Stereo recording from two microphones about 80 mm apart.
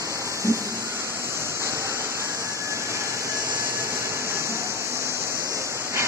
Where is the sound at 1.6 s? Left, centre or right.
Right.